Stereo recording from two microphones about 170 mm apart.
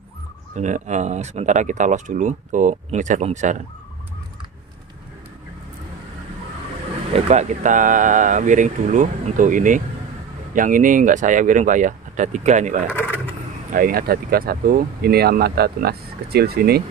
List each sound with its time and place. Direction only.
0.6 s speech: 45° right (ahead or behind)
7.2 s speech: 45° right (ahead or behind)
13.3 s speech: 55° right (ahead or behind)